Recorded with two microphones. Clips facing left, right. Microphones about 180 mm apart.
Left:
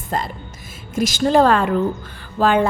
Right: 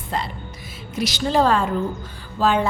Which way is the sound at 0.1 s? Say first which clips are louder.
Left 3 dB; 45° left (ahead or behind).